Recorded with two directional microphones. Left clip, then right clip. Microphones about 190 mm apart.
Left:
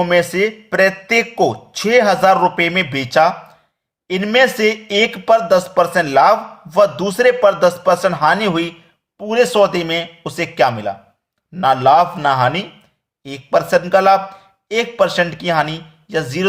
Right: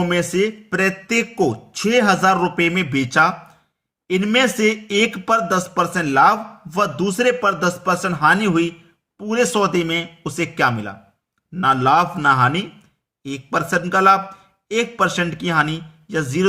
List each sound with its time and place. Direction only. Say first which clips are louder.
0.3 s a man's voice: left 5 dB; 20° right (ahead or behind)